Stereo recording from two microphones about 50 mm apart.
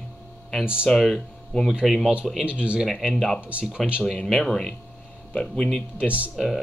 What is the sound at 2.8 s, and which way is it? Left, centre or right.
Speech, centre.